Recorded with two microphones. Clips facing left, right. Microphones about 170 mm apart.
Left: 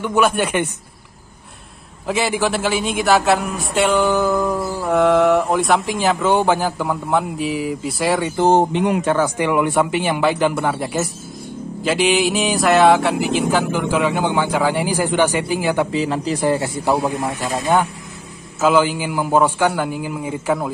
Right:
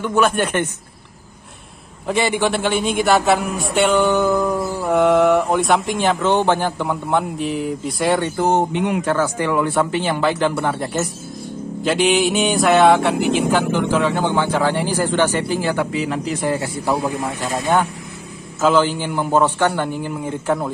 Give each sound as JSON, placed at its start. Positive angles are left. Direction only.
{"t": 0.0, "sound": "speech", "side_deg": 10}
{"t": 2.0, "sound": "a man's voice", "side_deg": 0}
{"t": 8.4, "sound": "speech", "side_deg": 30}
{"t": 9.0, "sound": "speech", "side_deg": 15}
{"t": 15.9, "sound": "a man's voice", "side_deg": 30}
{"t": 18.6, "sound": "a man's voice", "side_deg": 10}